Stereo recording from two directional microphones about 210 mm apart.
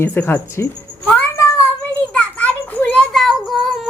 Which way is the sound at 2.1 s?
5° left (ahead or behind).